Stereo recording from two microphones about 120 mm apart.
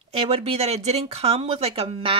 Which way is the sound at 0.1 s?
55° right (ahead or behind).